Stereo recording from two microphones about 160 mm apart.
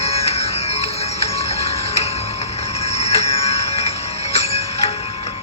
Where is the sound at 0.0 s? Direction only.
40° left (ahead or behind).